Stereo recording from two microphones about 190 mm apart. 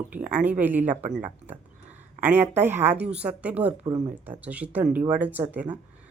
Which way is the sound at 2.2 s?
10° right (ahead or behind).